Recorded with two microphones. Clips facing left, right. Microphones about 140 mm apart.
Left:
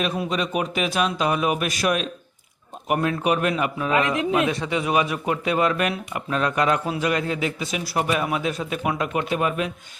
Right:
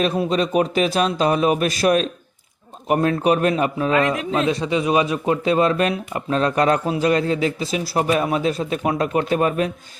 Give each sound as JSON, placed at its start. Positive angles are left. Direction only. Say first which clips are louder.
{"t": 0.0, "sound": "a man's voice", "louder": "right 5 dB", "side_deg": -30}
{"t": 4.1, "sound": "speech", "louder": "even", "side_deg": 15}
{"t": 4.4, "sound": "a man's voice", "louder": "right 4 dB", "side_deg": -20}